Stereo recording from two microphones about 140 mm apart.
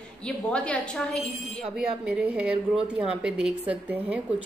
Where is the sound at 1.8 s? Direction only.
5° right (ahead or behind).